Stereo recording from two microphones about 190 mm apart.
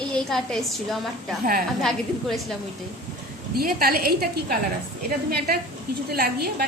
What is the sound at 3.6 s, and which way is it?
Speech, 50° right (ahead or behind).